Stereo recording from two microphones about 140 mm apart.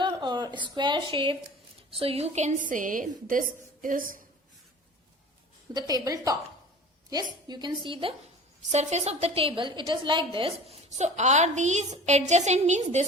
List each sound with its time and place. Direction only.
0.0 s a woman's voice: 30° right (ahead or behind); by 4.2 s 75° right (ahead or behind)
5.7 s a woman's voice: 25° right (ahead or behind)
7.4 s a woman's voice: 30° right (ahead or behind)
8.7 s a woman's voice: 55° right (ahead or behind); by 10.8 s 35° right (ahead or behind)
10.8 s a woman's voice: 55° right (ahead or behind)